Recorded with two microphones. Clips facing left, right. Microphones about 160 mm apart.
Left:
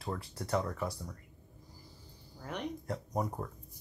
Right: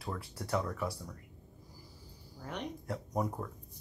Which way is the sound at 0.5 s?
25° left (ahead or behind).